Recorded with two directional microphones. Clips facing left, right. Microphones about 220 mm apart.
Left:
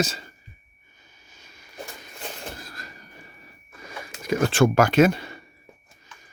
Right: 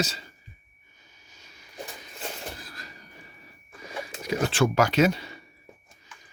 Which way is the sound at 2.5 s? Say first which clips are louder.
Left 2 dB; 50° left (ahead or behind).